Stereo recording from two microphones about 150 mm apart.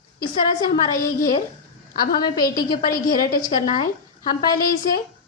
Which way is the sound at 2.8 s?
70° left (ahead or behind).